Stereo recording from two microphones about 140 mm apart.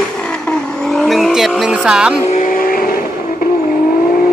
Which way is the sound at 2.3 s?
75° left (ahead or behind).